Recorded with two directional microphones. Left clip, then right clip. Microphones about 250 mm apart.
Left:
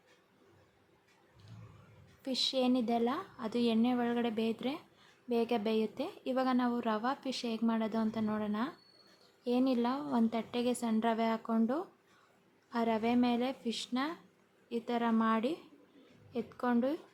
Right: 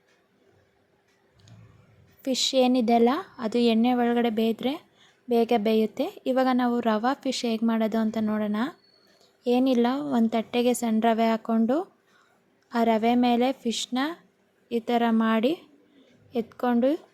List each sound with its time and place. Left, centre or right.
2.2 s speech: right